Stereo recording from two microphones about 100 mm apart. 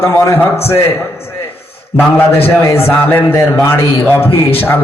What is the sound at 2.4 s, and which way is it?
A man's voice, 20° left (ahead or behind).